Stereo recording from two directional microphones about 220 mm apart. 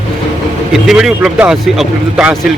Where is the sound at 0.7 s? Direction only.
Centre (ahead or behind).